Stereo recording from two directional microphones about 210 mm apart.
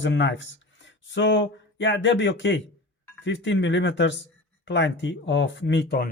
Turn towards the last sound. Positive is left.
turn(degrees=50)  # may be behind; listen again after turning